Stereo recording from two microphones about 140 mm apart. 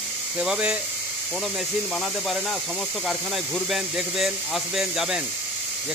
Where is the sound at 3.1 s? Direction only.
Centre (ahead or behind).